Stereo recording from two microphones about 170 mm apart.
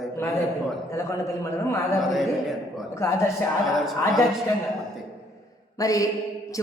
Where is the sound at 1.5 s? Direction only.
15° left (ahead or behind).